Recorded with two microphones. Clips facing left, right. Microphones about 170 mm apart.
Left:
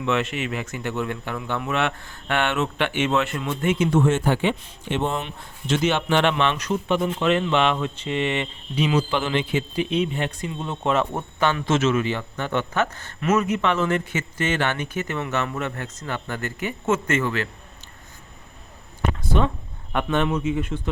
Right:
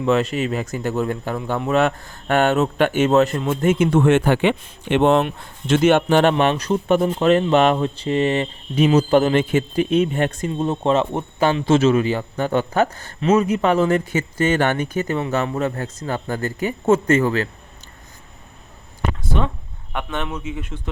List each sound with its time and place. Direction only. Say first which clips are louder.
0.0 s speech: right 5 dB; 35° right (ahead or behind)
19.9 s a man's voice: left 4 dB; 10° right (ahead or behind)